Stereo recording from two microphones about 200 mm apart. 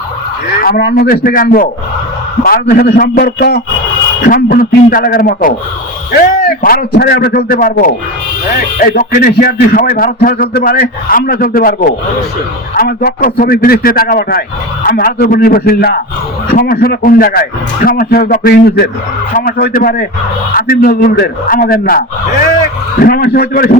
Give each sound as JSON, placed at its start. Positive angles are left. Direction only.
{"t": 0.6, "sound": "a man's voice", "side_deg": 55}
{"t": 6.6, "sound": "a man's voice", "side_deg": 45}
{"t": 9.0, "sound": "a man's voice", "side_deg": 45}